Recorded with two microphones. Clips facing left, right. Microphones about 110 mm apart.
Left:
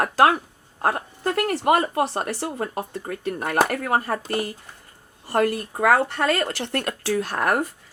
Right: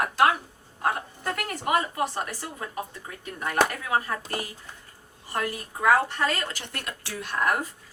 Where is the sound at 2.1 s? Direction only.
80° left.